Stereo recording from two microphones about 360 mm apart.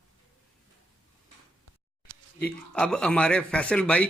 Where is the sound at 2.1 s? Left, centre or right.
Right.